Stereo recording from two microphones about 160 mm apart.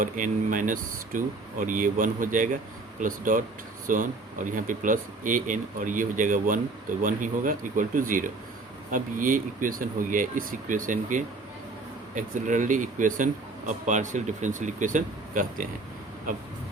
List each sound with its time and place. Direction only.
0.0 s a man's voice: 55° right (ahead or behind)